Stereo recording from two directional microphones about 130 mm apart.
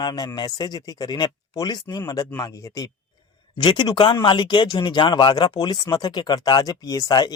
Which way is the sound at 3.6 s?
35° left (ahead or behind).